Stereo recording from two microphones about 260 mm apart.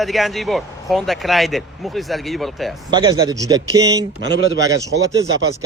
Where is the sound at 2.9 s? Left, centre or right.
Centre.